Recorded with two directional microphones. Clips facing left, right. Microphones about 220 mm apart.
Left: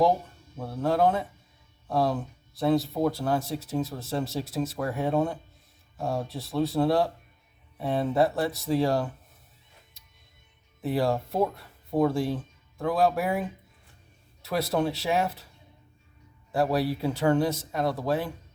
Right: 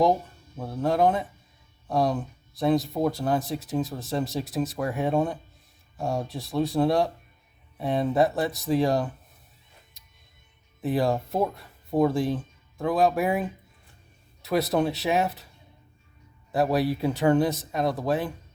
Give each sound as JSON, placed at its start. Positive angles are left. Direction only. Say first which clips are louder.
{"t": 0.8, "sound": "speech", "louder": "right 1 dB", "side_deg": -15}
{"t": 10.8, "sound": "speech", "louder": "right 1 dB", "side_deg": -20}
{"t": 14.4, "sound": "speech", "louder": "right 3 dB", "side_deg": -20}
{"t": 16.5, "sound": "speech", "louder": "right 2 dB", "side_deg": -20}